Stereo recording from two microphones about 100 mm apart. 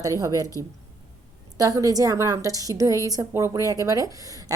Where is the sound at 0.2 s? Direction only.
35° right (ahead or behind).